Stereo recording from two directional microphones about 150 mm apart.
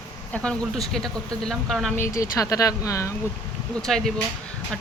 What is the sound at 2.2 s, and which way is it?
Speech, 20° left (ahead or behind).